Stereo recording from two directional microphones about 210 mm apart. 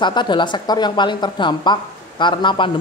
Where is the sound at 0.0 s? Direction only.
20° left (ahead or behind).